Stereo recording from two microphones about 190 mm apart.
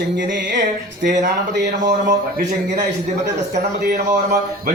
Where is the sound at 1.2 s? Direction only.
65° right (ahead or behind).